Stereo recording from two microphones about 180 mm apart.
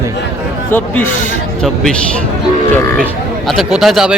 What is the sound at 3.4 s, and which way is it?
Speech, centre (ahead or behind).